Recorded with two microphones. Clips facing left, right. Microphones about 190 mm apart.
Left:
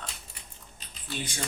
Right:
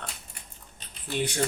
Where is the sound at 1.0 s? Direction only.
65° right (ahead or behind).